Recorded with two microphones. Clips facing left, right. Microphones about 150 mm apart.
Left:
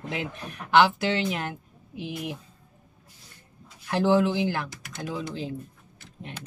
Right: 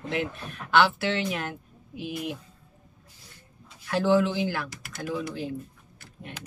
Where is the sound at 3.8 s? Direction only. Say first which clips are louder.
Left 1 dB; 20° left (ahead or behind).